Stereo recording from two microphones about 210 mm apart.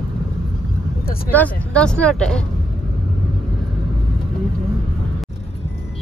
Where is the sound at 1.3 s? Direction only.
5° left (ahead or behind).